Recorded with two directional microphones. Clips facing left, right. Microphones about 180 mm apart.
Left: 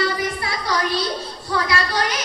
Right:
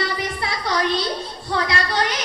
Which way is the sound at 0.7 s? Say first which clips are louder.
Right 1 dB; 25° right (ahead or behind).